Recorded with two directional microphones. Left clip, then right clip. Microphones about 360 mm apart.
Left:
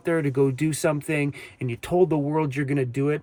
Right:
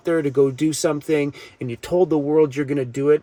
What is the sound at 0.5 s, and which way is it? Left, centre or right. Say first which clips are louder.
Speech: right 5 dB; left.